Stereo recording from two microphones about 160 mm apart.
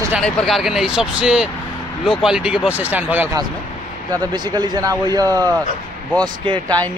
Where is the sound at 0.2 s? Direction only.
Centre (ahead or behind).